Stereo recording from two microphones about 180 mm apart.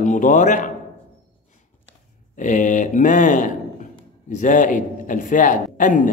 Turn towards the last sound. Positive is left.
turn(degrees=45)  # may be behind; listen again after turning